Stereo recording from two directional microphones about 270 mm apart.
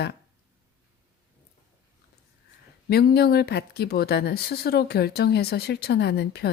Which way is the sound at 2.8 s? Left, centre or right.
Left.